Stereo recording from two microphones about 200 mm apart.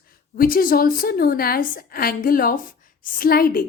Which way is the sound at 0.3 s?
45° left (ahead or behind).